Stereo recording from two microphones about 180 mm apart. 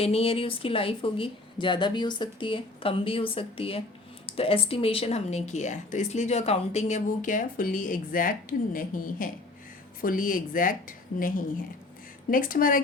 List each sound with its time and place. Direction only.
0.0 s speech: 35° left (ahead or behind); by 12.8 s 50° left (ahead or behind)